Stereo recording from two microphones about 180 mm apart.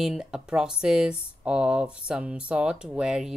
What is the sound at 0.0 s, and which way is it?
Speech, 5° right (ahead or behind).